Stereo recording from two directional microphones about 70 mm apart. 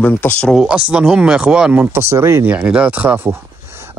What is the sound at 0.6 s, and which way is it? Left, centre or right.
Speech, centre.